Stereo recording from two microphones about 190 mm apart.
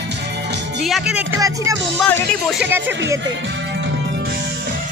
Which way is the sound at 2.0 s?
10° left (ahead or behind).